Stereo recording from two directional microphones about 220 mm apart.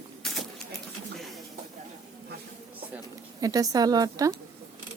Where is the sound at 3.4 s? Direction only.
15° right (ahead or behind).